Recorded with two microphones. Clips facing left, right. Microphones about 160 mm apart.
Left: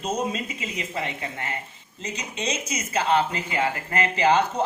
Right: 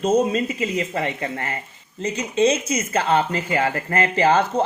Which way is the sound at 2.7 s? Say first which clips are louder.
Right 3 dB; 45° right (ahead or behind).